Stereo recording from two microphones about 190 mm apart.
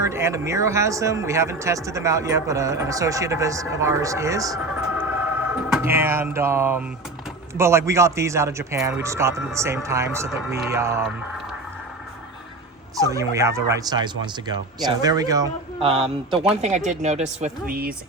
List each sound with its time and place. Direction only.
0.0 s speech: 15° right (ahead or behind)
13.0 s speech: 15° right (ahead or behind)
16.6 s speech: 35° right (ahead or behind)